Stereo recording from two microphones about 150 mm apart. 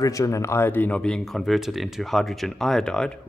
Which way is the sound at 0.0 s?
20° left (ahead or behind).